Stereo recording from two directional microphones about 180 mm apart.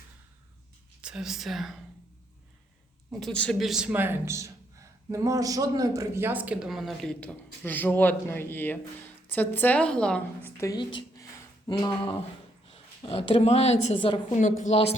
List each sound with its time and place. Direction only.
1.0 s a man's voice: 5° right (ahead or behind)
3.1 s a man's voice: centre (ahead or behind); by 11.9 s 15° left (ahead or behind)
12.6 s a woman's voice: 30° left (ahead or behind)